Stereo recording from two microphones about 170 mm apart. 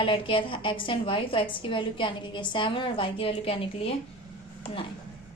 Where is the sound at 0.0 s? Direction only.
30° left (ahead or behind).